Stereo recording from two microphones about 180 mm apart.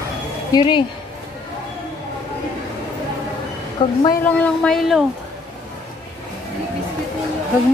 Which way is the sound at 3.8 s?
25° left (ahead or behind).